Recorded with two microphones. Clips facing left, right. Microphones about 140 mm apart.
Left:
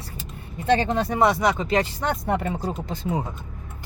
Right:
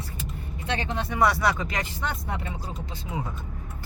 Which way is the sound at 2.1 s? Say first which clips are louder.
Left 8 dB; 50° left (ahead or behind).